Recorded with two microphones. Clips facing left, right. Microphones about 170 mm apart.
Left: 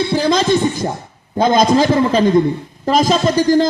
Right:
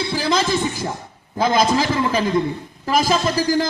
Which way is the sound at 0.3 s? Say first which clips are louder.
Left 4 dB; 20° left (ahead or behind).